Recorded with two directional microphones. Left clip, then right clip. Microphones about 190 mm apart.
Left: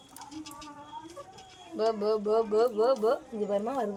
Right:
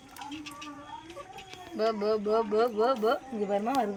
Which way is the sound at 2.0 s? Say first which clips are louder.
Left 1 dB; 70° left (ahead or behind).